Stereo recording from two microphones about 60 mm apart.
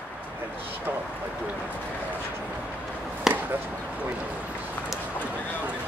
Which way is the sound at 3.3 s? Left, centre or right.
Centre.